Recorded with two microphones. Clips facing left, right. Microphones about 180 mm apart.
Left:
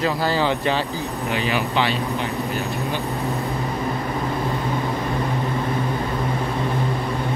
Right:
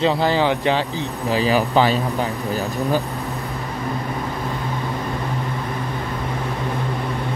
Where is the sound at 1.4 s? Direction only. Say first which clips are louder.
Right 6 dB; 40° right (ahead or behind).